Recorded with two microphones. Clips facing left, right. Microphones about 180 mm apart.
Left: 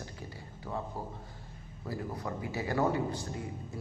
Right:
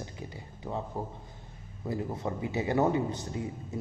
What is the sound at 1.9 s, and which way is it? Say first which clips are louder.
Speech: right 4 dB; 20° right (ahead or behind).